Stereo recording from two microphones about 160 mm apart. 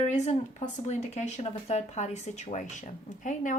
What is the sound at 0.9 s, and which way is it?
A woman's voice, 45° left (ahead or behind).